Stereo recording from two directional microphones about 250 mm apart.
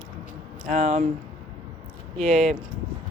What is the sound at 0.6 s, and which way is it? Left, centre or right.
Speech, right.